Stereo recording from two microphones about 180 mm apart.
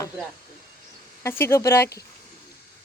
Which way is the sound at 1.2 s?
15° left (ahead or behind).